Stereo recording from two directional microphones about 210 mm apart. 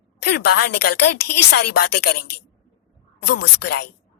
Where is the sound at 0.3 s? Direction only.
50° left (ahead or behind).